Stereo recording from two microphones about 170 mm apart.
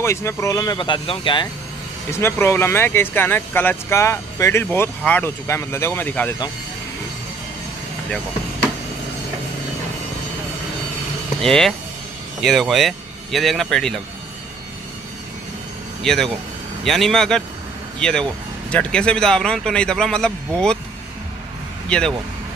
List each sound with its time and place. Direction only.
0.0 s speech: 15° left (ahead or behind)
2.0 s speech: 15° left (ahead or behind)
11.4 s speech: 5° left (ahead or behind)
16.0 s speech: 5° left (ahead or behind)
21.8 s speech: 5° left (ahead or behind)